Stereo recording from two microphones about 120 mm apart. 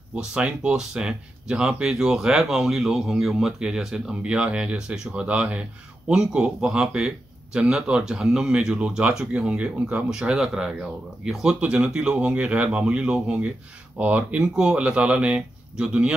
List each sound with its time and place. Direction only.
0.1 s speech: 10° right (ahead or behind)